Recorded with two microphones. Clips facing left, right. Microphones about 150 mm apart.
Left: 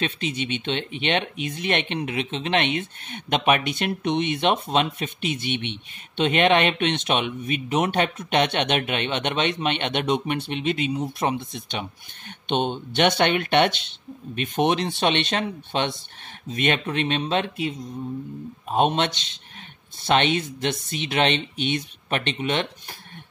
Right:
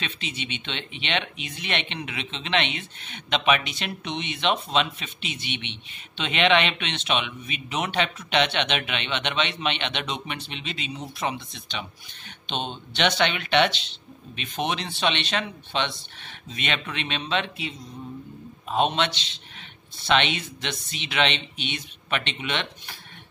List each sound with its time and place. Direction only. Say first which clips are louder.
0.0 s speech: left 7 dB; 45° left (ahead or behind)